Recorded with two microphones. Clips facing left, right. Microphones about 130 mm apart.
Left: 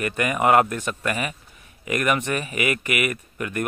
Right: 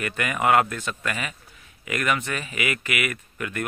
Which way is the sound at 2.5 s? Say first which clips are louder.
Left 2 dB; 35° left (ahead or behind).